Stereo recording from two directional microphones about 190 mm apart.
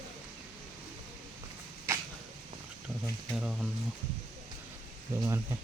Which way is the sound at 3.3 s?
Centre (ahead or behind).